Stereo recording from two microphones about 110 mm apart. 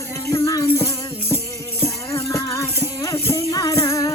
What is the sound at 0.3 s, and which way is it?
Music, 30° left (ahead or behind).